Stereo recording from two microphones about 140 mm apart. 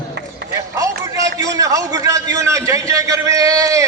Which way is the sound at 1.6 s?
25° right (ahead or behind).